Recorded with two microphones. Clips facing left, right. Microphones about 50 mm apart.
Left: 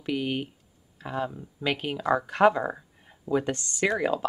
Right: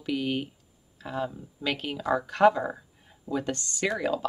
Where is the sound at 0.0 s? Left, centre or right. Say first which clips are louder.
Even; centre.